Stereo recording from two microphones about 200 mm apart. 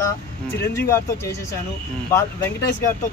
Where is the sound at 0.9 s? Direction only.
15° left (ahead or behind).